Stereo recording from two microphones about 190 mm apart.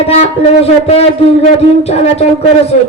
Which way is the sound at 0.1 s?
35° left (ahead or behind).